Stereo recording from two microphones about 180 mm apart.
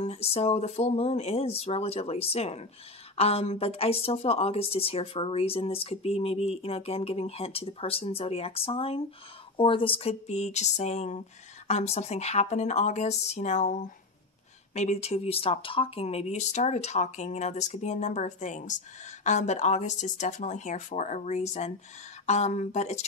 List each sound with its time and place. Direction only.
0.0 s a woman's voice: 35° left (ahead or behind)